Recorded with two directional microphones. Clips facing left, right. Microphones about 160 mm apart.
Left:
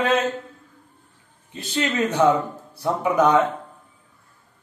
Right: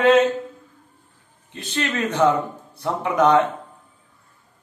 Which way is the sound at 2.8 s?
5° left (ahead or behind).